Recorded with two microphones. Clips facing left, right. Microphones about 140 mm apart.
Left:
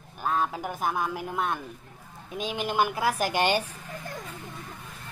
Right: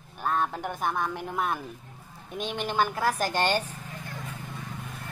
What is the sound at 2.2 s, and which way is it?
Speech, centre (ahead or behind).